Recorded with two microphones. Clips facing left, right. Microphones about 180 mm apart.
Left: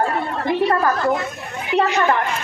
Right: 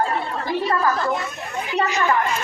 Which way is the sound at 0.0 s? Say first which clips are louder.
Left 3 dB; 60° left (ahead or behind).